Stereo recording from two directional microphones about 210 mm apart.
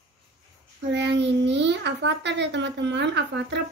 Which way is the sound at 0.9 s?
55° right (ahead or behind).